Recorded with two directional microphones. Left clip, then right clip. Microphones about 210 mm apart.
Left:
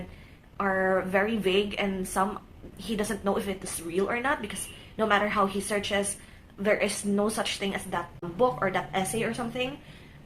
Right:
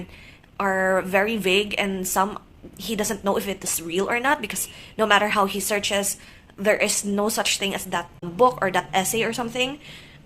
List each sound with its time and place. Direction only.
0.5 s a woman's voice: 45° right (ahead or behind)